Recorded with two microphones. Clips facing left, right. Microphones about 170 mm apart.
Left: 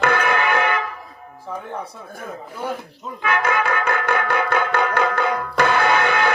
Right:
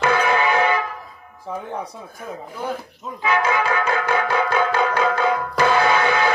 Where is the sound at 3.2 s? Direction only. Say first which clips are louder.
Right 1 dB; 55° left (ahead or behind).